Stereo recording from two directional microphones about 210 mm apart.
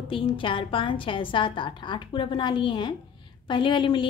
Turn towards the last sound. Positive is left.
turn(degrees=25)  # may be behind; listen again after turning